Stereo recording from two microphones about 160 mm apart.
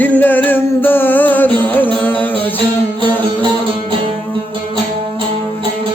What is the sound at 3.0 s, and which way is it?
Music, 30° right (ahead or behind).